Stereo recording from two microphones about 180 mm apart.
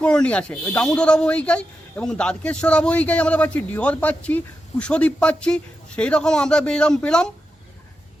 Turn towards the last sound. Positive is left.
turn(degrees=5)  # may be behind; listen again after turning